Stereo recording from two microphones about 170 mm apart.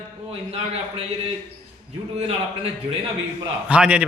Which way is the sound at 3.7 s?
5° right (ahead or behind).